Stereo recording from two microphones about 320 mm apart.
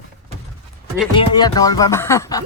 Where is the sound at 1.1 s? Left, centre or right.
Centre.